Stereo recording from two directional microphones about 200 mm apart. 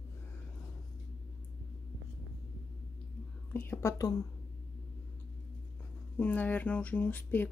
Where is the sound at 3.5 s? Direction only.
10° left (ahead or behind).